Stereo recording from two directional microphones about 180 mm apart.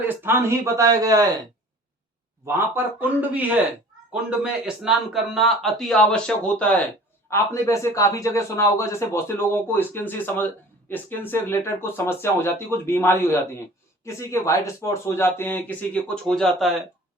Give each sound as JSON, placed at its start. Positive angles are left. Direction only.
{"t": 0.1, "sound": "speech", "side_deg": -10}
{"t": 2.5, "sound": "a man's voice", "side_deg": -10}